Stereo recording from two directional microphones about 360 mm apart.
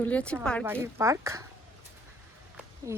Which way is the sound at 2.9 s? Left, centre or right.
Centre.